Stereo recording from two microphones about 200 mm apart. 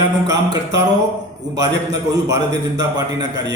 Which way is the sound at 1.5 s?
20° right (ahead or behind).